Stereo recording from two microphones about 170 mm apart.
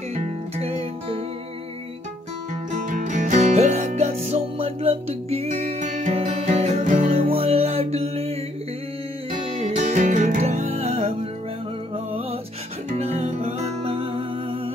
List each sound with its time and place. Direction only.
0.1 s music: 35° right (ahead or behind)
2.7 s music: 50° right (ahead or behind)
7.1 s music: 35° right (ahead or behind)
9.5 s music: 35° right (ahead or behind)
12.9 s music: 40° right (ahead or behind)